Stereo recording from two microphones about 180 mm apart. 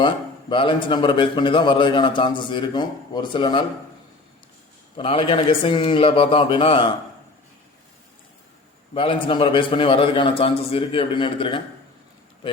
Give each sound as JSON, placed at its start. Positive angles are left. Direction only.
{"t": 0.0, "sound": "a man's voice", "side_deg": 25}
{"t": 4.9, "sound": "a man's voice", "side_deg": 30}
{"t": 9.2, "sound": "a man's voice", "side_deg": 25}